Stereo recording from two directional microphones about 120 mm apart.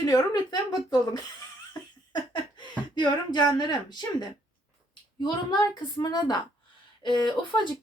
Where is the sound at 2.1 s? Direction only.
40° left (ahead or behind).